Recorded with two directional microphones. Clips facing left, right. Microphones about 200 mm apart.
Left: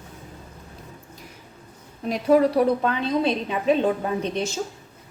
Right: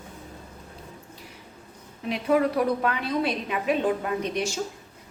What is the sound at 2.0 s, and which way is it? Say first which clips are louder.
A woman's voice: left 4 dB; 40° left (ahead or behind).